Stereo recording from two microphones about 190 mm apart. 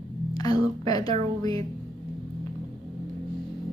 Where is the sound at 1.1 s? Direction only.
20° left (ahead or behind).